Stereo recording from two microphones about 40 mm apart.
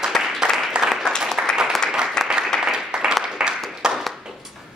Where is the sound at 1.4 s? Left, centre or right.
Right.